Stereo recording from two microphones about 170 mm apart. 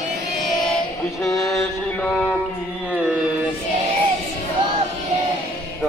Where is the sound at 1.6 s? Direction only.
5° left (ahead or behind).